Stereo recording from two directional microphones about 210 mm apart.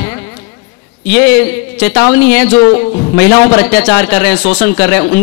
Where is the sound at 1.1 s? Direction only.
10° left (ahead or behind).